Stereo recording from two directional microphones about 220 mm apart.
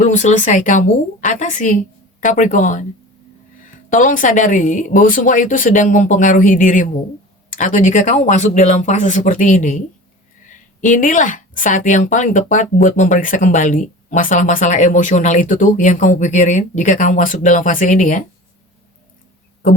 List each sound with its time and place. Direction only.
0.0 s a woman's voice: 35° left (ahead or behind)